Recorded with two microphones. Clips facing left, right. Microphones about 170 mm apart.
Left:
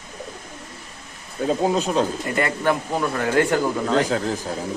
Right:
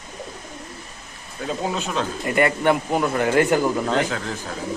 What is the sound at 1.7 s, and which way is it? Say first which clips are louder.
Speech: left 5 dB; 35° left (ahead or behind).